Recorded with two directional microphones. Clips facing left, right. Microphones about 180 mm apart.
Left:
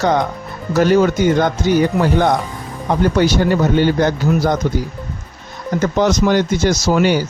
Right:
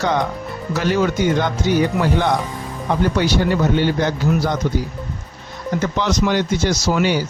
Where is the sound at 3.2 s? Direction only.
45° left (ahead or behind).